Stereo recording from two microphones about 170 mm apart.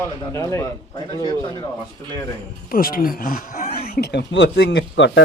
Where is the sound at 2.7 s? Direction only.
60° left (ahead or behind); by 5.2 s 90° left.